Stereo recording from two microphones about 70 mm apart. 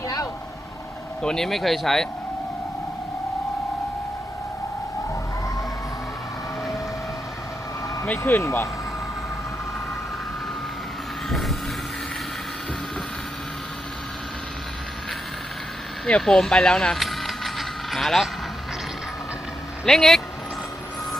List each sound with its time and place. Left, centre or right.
1.2 s speech: centre
8.4 s speech: left
11.3 s vehicle: centre
16.0 s a sound: centre
19.8 s speech: centre